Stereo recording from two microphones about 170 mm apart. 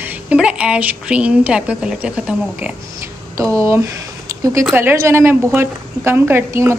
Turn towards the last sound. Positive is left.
turn(degrees=-15)  # may be behind; listen again after turning